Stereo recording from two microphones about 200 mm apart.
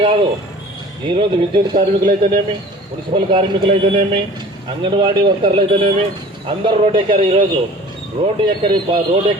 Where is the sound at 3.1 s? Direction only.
30° right (ahead or behind).